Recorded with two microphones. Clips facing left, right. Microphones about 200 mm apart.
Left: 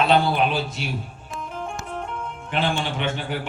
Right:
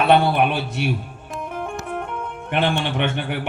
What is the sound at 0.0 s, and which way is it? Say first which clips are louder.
Speech: right 3 dB; 60° right (ahead or behind).